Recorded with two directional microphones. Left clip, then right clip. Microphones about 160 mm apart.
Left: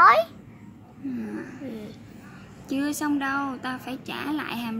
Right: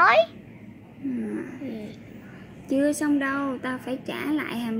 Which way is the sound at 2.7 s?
10° right (ahead or behind).